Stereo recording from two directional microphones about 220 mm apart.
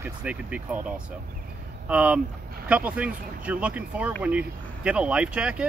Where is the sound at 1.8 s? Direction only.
5° right (ahead or behind).